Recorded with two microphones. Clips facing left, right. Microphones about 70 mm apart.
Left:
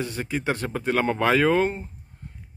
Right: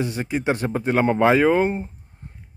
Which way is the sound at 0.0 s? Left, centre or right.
Centre.